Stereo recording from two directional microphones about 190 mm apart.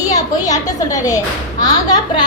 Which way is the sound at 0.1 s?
20° left (ahead or behind).